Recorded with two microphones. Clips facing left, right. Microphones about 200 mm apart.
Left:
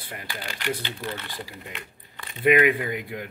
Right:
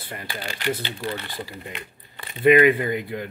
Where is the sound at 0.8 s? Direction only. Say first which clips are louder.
Right 3 dB; 30° right (ahead or behind).